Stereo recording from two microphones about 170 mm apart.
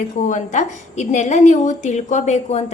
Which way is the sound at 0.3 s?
45° left (ahead or behind).